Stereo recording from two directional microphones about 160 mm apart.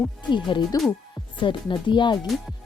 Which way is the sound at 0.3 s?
30° left (ahead or behind).